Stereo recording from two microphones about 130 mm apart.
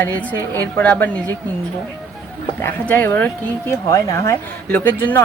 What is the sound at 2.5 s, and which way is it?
Speech, 15° left (ahead or behind).